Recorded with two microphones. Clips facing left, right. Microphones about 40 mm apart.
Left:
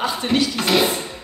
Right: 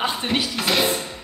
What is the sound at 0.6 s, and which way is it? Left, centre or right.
Speech, centre.